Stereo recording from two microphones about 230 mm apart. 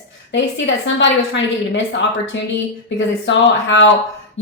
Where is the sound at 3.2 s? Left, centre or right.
Left.